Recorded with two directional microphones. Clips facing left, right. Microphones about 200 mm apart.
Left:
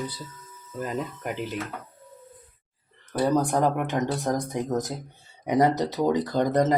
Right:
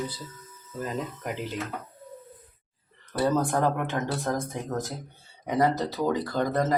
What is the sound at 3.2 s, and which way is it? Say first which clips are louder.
Speech: left 2 dB; 15° left (ahead or behind).